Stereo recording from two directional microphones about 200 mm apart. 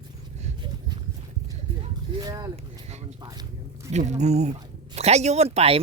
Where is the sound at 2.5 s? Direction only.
35° right (ahead or behind).